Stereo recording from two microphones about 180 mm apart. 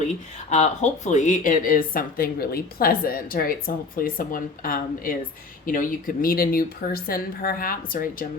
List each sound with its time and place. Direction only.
0.5 s speech: 40° left (ahead or behind)